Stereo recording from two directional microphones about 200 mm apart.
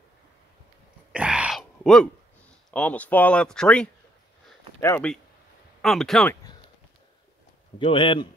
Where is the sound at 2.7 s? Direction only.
5° left (ahead or behind).